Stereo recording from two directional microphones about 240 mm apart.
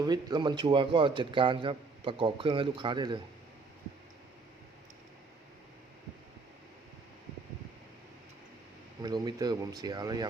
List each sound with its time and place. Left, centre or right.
0.0 s speech: centre
9.0 s speech: centre